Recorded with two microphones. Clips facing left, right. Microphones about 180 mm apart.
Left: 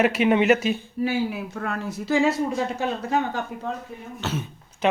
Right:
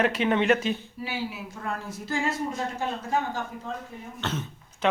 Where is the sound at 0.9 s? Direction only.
50° left (ahead or behind); by 3.7 s 70° left (ahead or behind).